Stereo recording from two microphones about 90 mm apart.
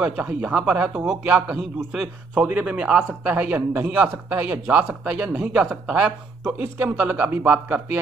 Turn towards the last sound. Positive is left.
turn(degrees=-20)  # may be behind; listen again after turning